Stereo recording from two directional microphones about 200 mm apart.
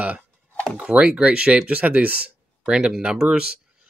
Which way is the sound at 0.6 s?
Centre (ahead or behind).